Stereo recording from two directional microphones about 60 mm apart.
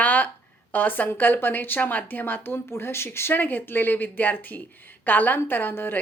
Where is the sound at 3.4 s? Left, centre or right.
Left.